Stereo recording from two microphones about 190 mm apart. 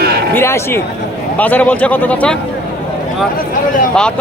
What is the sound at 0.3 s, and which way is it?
A man's voice, 15° left (ahead or behind).